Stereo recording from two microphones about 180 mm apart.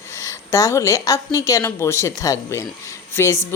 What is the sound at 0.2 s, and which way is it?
A woman's voice, 20° left (ahead or behind).